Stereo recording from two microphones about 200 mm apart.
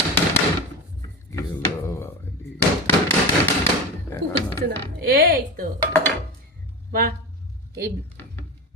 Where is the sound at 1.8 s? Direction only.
15° left (ahead or behind).